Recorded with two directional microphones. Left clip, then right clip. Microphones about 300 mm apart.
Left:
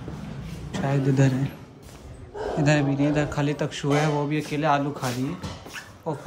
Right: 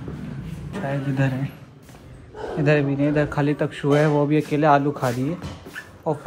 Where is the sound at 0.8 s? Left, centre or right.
Centre.